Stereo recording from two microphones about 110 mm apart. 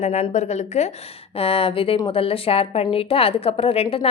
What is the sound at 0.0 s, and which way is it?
A woman's voice, 90° left.